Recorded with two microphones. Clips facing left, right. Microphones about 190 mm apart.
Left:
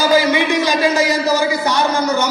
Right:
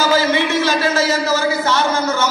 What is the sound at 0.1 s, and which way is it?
A man's voice, 15° left (ahead or behind).